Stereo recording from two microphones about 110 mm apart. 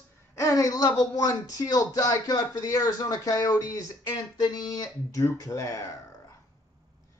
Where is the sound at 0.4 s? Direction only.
30° left (ahead or behind).